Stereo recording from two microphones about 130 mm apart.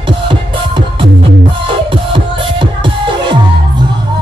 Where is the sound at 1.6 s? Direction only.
40° right (ahead or behind).